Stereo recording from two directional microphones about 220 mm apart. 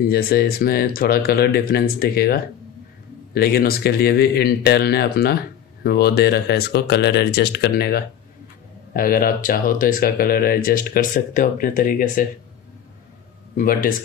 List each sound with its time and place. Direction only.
0.0 s speech: 45° left (ahead or behind)
13.6 s speech: 40° left (ahead or behind)